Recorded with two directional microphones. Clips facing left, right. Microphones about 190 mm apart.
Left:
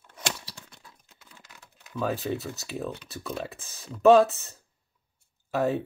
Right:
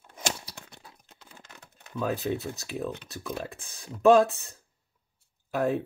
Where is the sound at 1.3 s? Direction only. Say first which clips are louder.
Right 2 dB; 55° right (ahead or behind).